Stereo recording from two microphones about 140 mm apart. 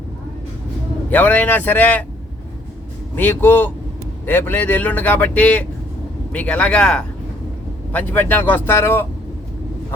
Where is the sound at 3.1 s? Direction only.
15° left (ahead or behind).